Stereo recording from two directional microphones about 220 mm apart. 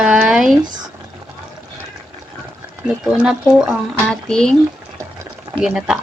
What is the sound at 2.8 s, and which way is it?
Speech, 5° right (ahead or behind).